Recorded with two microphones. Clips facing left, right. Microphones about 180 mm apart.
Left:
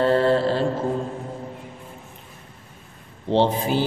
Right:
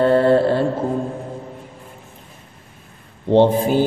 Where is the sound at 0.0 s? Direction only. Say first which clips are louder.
Right 4 dB; 55° right (ahead or behind).